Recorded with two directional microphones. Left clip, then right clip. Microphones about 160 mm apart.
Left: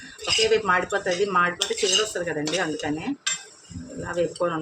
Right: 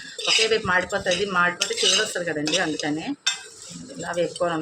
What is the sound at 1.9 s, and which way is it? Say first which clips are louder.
Cutlery: right 1 dB; 25° left (ahead or behind).